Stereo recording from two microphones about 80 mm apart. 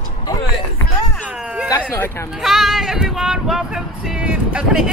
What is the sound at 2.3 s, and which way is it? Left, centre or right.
Speech, centre.